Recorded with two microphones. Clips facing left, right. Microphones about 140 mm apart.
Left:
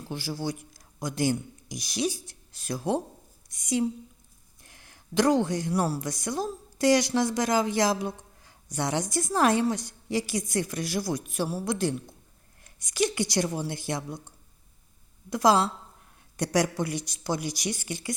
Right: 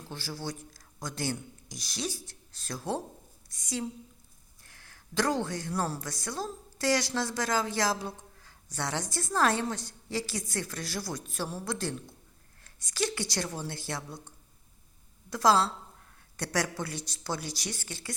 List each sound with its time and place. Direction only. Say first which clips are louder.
0.0 s a woman's voice: left 6 dB; 15° left (ahead or behind)